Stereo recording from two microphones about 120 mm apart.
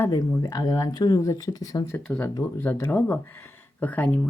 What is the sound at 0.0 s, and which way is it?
Speech, 25° left (ahead or behind).